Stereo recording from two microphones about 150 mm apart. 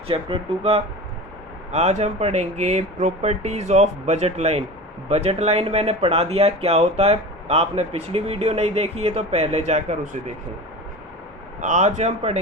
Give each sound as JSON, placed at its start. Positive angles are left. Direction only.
{"t": 0.1, "sound": "speech", "side_deg": -40}
{"t": 11.6, "sound": "speech", "side_deg": -50}